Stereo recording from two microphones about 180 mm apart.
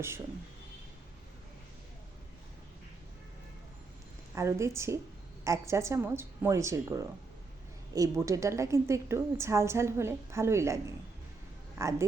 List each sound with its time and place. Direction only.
4.4 s a woman's voice: 15° right (ahead or behind)
11.8 s a woman's voice: 15° right (ahead or behind)